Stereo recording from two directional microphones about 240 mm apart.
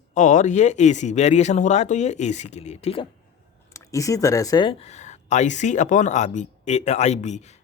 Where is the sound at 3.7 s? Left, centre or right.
Centre; by 7.6 s left.